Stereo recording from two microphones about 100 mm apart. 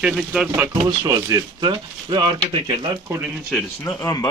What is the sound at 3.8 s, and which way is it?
Speech, 35° left (ahead or behind).